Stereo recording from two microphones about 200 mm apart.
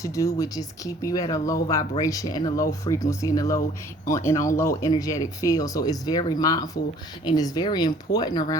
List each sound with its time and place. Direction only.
0.0 s speech: 15° left (ahead or behind)